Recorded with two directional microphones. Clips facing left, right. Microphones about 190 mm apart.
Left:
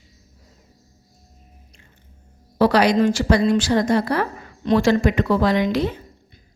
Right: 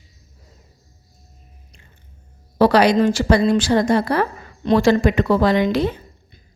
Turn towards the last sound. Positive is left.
turn(degrees=-30)  # may be behind; listen again after turning